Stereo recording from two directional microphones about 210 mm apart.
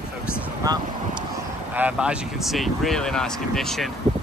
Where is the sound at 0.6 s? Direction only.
20° right (ahead or behind).